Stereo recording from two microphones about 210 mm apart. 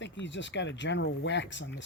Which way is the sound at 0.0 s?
60° left (ahead or behind).